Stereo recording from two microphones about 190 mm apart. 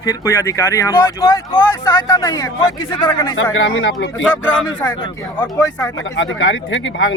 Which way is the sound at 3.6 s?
70° left (ahead or behind).